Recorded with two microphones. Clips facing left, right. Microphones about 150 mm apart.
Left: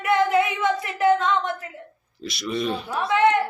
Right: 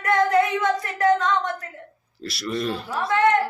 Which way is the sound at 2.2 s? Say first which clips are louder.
Even; centre (ahead or behind).